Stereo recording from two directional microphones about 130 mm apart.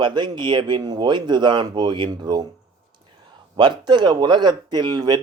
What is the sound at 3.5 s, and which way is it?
Speech, 35° right (ahead or behind).